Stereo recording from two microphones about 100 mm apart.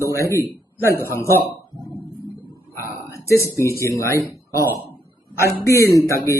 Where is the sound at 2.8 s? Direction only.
30° left (ahead or behind).